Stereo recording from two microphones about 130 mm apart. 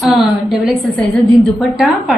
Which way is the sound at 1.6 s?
Centre (ahead or behind).